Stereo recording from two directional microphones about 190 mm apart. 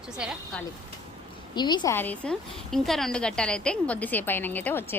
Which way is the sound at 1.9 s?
10° left (ahead or behind).